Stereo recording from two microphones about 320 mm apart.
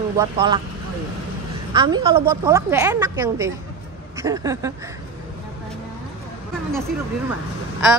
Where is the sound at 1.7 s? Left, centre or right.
Centre.